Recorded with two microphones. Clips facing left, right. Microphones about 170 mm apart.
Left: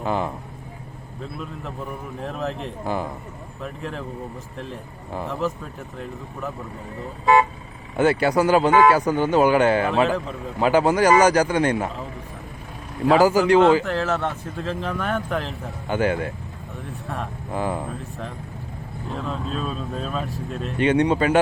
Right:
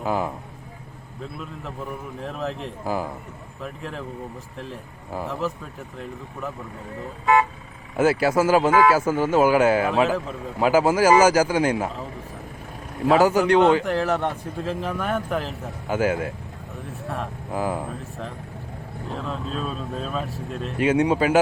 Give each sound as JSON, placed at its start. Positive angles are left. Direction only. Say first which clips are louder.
{"t": 0.0, "sound": "a man's voice", "louder": "even", "side_deg": -5}
{"t": 7.3, "sound": "vehicle", "louder": "left 2 dB", "side_deg": 30}
{"t": 7.9, "sound": "a man's voice", "louder": "left 1 dB", "side_deg": 0}
{"t": 13.1, "sound": "a man's voice", "louder": "left 1 dB", "side_deg": 0}
{"t": 13.8, "sound": "a man's voice", "louder": "right 1 dB", "side_deg": -15}